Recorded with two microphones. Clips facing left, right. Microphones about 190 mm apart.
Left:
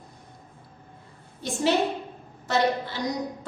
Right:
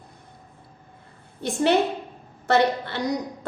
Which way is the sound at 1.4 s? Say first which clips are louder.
Right 3 dB; 60° right (ahead or behind).